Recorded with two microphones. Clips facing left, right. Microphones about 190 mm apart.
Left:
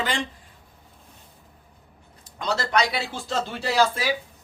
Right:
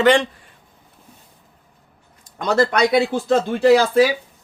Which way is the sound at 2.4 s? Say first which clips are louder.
Right 7 dB; 55° right (ahead or behind).